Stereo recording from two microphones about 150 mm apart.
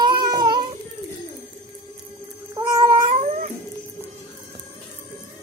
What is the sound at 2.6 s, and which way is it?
Cat, 20° right (ahead or behind).